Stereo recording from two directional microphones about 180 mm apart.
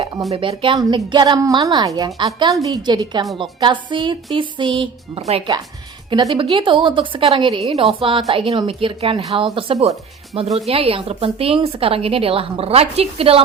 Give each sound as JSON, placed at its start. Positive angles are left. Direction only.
{"t": 0.3, "sound": "a woman's voice", "side_deg": -30}